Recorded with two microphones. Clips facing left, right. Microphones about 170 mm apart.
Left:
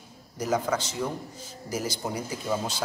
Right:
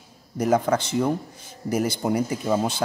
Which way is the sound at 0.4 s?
55° right (ahead or behind).